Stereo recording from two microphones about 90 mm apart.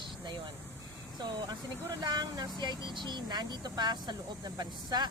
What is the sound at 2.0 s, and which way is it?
Speech, 50° right (ahead or behind).